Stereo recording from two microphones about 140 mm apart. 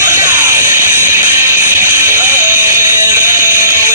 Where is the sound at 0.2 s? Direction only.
20° right (ahead or behind).